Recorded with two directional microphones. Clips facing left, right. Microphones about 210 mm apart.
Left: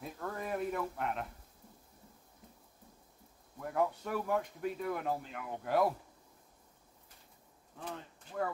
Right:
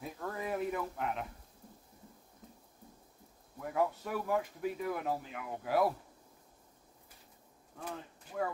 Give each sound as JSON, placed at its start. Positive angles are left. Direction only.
{"t": 0.0, "sound": "a sound", "side_deg": 0}
{"t": 3.5, "sound": "speech", "side_deg": 0}
{"t": 7.8, "sound": "speech", "side_deg": -5}